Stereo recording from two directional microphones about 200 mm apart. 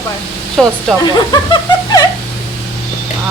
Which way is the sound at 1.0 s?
20° left (ahead or behind).